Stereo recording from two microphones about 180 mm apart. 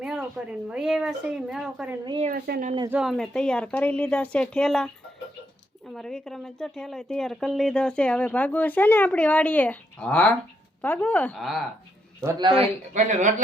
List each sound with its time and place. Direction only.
0.0 s a sound: 5° right (ahead or behind)
0.7 s speech: 5° right (ahead or behind)
2.3 s speech: 55° right (ahead or behind)
2.9 s speech: centre (ahead or behind)
5.9 s speech: 5° left (ahead or behind)
12.2 s a man's voice: 15° right (ahead or behind)
12.5 s speech: 35° right (ahead or behind)